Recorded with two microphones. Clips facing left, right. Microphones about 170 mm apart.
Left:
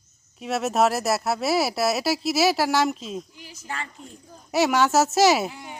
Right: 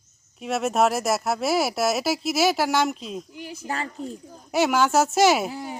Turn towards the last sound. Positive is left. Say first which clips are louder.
# right 7 dB
turn(degrees=-35)  # may be behind; listen again after turning